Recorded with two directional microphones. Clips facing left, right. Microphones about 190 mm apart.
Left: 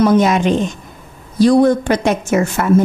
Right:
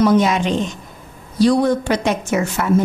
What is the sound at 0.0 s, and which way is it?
A woman's voice, 50° left (ahead or behind).